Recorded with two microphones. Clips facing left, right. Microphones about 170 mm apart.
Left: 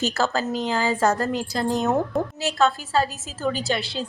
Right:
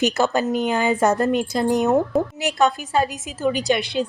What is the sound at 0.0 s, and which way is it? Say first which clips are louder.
A woman's voice: right 4 dB; 20° right (ahead or behind).